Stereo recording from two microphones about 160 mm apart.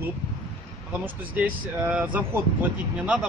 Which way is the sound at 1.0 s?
10° right (ahead or behind).